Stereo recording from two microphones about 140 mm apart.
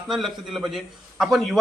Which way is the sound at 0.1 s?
Centre (ahead or behind).